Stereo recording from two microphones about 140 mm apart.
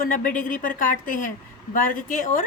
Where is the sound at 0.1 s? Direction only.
70° left (ahead or behind).